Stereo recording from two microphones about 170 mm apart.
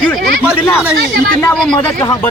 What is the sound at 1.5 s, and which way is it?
Speech, 5° left (ahead or behind).